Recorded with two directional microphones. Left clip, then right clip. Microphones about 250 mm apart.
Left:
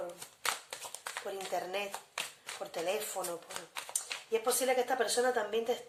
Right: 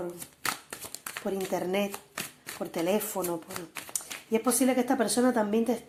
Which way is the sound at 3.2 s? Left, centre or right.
Right.